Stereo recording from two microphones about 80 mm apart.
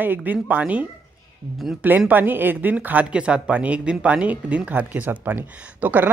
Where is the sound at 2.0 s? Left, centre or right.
Right.